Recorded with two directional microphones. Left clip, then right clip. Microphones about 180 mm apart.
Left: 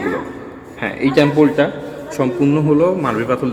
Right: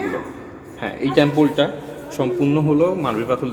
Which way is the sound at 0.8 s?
20° left (ahead or behind).